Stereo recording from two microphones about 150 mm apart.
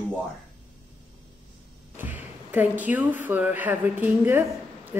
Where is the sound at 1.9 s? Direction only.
10° right (ahead or behind).